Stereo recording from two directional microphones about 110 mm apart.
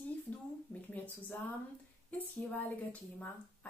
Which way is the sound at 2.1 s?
15° left (ahead or behind).